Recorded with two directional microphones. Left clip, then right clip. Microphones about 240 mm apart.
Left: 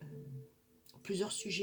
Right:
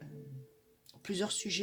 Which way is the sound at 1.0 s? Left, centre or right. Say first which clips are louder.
Right 2 dB; right.